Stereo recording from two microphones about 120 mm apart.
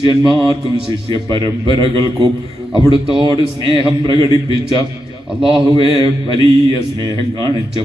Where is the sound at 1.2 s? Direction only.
40° right (ahead or behind).